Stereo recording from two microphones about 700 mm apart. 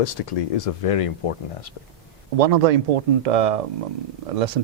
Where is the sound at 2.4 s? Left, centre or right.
Right.